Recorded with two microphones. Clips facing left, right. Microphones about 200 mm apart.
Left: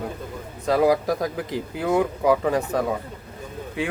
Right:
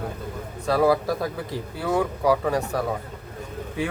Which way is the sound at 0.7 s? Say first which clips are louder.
Left 1 dB; 15° left (ahead or behind).